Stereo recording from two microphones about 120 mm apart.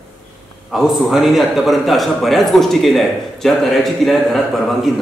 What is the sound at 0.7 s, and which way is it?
A man's voice, centre (ahead or behind).